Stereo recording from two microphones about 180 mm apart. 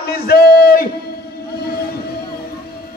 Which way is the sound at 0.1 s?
60° left (ahead or behind).